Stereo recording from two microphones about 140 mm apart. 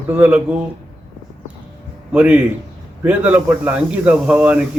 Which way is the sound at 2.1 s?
10° right (ahead or behind).